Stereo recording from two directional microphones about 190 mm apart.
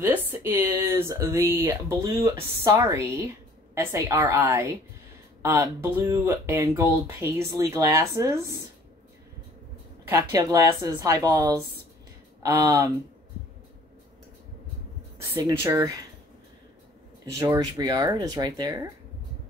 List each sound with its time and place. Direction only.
0.0 s speech: 10° right (ahead or behind)
10.0 s speech: 15° right (ahead or behind)
15.1 s speech: 15° right (ahead or behind)
17.3 s speech: 15° right (ahead or behind)